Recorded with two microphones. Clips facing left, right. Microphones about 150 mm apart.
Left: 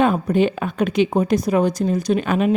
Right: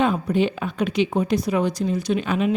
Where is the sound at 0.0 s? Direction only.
50° left (ahead or behind).